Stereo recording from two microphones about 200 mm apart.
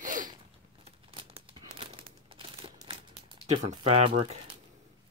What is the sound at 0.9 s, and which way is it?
Crumpling, 30° right (ahead or behind).